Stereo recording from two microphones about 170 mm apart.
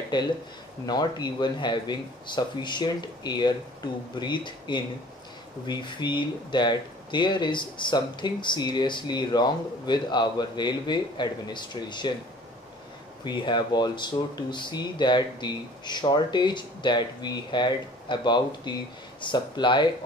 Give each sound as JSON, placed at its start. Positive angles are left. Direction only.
{"t": 0.1, "sound": "speech", "side_deg": 25}
{"t": 13.2, "sound": "speech", "side_deg": 25}